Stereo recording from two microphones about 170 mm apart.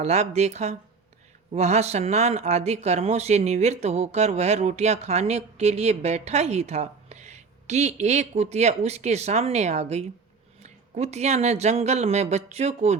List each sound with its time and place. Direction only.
0.0 s speech: 40° right (ahead or behind)